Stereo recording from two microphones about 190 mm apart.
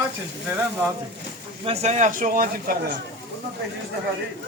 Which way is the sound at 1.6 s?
35° right (ahead or behind).